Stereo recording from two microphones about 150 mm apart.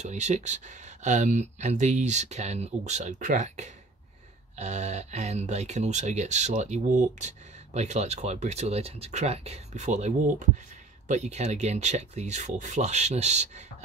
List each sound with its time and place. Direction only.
0.0 s speech: 50° right (ahead or behind)